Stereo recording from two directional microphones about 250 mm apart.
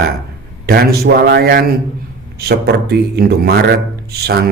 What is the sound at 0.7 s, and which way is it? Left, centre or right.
Speech, right.